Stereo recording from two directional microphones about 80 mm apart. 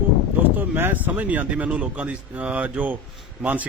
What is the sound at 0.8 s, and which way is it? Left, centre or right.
Speech, right.